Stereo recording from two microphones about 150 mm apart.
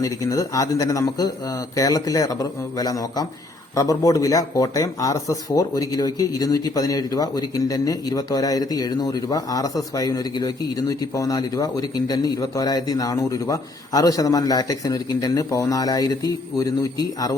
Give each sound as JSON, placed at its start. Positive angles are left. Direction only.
{"t": 0.0, "sound": "speech", "side_deg": 20}